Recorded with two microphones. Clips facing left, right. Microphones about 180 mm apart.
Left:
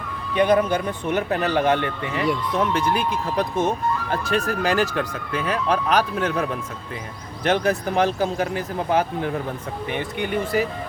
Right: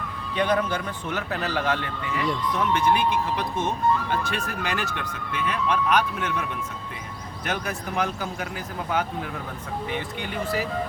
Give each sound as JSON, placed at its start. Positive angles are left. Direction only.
{"t": 0.3, "sound": "speech", "side_deg": 15}